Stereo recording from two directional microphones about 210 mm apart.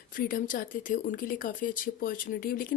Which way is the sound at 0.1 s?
40° left (ahead or behind).